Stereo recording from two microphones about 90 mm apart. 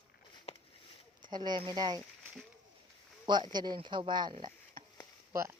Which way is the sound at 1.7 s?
50° right (ahead or behind).